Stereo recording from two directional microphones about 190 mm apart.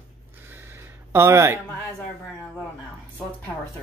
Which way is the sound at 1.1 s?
15° right (ahead or behind).